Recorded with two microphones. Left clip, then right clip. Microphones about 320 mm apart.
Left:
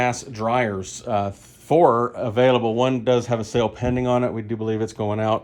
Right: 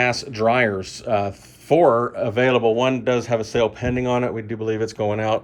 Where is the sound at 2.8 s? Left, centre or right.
Centre.